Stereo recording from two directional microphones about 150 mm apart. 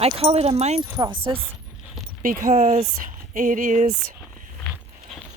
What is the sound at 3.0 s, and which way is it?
Speech, 60° right (ahead or behind).